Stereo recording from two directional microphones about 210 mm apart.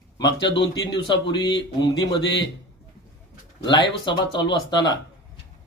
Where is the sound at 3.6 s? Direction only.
20° left (ahead or behind).